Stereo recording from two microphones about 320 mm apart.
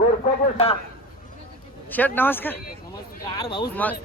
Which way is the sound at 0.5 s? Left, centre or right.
Centre.